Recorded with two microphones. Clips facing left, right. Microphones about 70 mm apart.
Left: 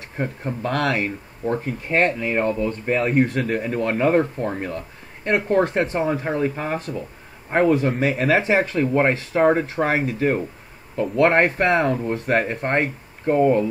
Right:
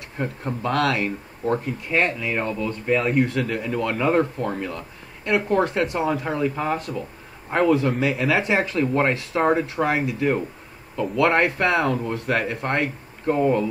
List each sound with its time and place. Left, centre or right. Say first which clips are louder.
0.6 s speech: even; left
1.9 s speech: left 3 dB; left